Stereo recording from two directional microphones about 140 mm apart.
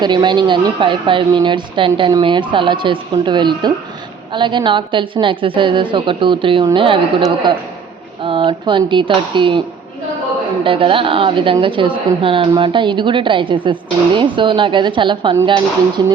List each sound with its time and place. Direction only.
0.0 s a woman's voice: 35° right (ahead or behind)